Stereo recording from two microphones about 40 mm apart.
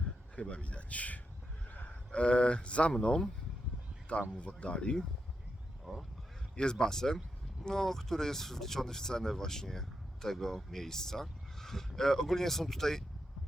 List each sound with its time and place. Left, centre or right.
0.3 s speech: left
1.7 s a sound: left
2.1 s speech: left
4.4 s speech: left
5.8 s speech: centre
6.6 s speech: centre